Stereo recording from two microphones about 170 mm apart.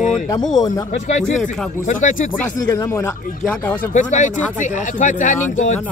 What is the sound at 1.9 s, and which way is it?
Speech, 50° left (ahead or behind).